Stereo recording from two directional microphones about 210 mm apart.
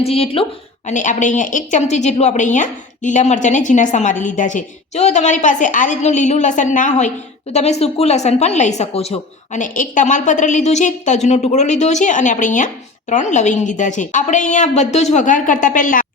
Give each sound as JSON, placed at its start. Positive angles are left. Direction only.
{"t": 0.0, "sound": "a woman's voice", "side_deg": 30}